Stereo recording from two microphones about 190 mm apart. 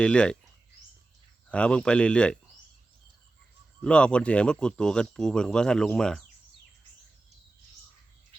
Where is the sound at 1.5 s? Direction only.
5° left (ahead or behind).